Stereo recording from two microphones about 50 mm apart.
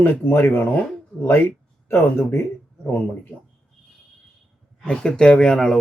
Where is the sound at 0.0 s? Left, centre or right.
Left.